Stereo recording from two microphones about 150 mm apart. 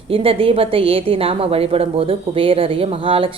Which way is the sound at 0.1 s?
40° right (ahead or behind).